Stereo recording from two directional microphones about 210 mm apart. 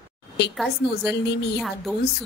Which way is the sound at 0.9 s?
50° left (ahead or behind).